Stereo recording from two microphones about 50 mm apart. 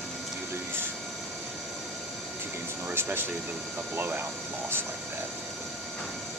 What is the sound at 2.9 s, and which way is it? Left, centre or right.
Speech, right.